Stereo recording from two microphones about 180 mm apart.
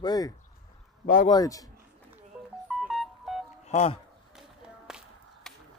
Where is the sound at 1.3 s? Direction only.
20° left (ahead or behind).